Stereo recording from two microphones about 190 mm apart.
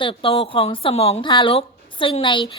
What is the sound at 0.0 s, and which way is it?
A woman's voice, 25° left (ahead or behind).